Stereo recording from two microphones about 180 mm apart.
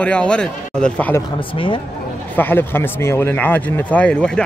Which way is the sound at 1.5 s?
30° left (ahead or behind).